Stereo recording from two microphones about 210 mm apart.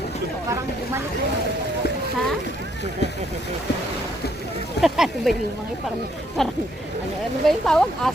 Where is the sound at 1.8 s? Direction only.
45° left (ahead or behind).